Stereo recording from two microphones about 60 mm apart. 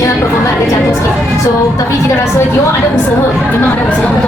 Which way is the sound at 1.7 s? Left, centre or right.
Left.